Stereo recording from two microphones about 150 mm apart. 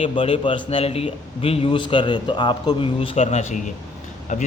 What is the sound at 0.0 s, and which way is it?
A man's voice, 35° left (ahead or behind).